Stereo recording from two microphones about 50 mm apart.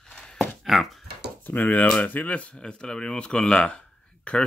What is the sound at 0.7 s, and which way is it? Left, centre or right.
Dog, centre.